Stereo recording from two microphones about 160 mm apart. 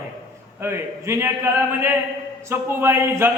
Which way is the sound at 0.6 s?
15° right (ahead or behind).